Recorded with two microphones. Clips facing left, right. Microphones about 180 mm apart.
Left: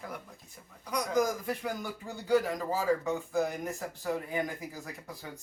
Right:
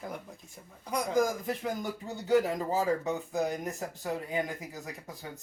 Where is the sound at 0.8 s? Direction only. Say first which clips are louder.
Right 1 dB; 25° right (ahead or behind).